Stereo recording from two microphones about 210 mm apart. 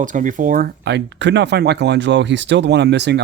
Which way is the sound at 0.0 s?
40° right (ahead or behind).